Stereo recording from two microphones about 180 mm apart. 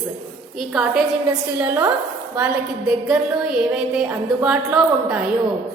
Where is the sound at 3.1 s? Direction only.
5° right (ahead or behind).